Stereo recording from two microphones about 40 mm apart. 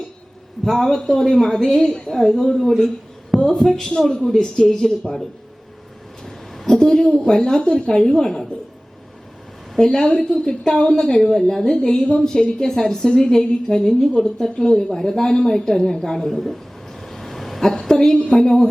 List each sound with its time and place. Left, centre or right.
0.6 s a woman's voice: centre
6.7 s a woman's voice: centre
9.7 s a woman's voice: centre
11.0 s a woman's voice: centre
17.0 s a sound: centre
18.3 s a woman's voice: centre